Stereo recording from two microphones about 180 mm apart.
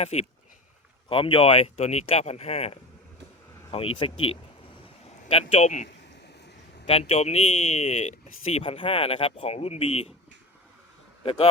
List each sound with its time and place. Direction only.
0.0 s speech: 35° left (ahead or behind)